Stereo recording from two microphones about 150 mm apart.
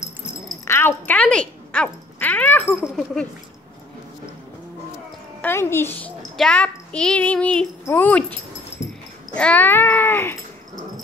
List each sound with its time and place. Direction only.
0.7 s speech: 15° left (ahead or behind)
2.7 s speech: centre (ahead or behind)
5.4 s a child's voice: 15° left (ahead or behind)
7.8 s cat: 15° left (ahead or behind)